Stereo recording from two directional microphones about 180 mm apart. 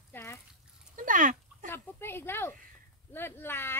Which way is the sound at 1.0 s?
45° right (ahead or behind).